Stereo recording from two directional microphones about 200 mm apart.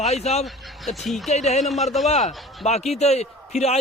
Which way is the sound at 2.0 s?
35° left (ahead or behind).